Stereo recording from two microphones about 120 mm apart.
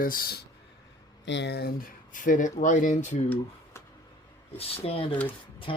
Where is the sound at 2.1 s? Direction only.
90° left.